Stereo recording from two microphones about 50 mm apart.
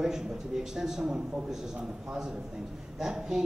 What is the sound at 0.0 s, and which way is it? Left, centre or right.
Speech, centre.